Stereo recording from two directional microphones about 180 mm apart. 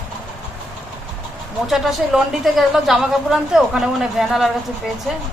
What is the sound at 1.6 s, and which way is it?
Speech, centre (ahead or behind).